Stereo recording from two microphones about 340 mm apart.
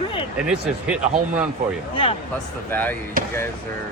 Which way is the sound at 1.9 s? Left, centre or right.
Centre.